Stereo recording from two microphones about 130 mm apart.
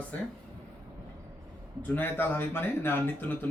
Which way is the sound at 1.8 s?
15° left (ahead or behind).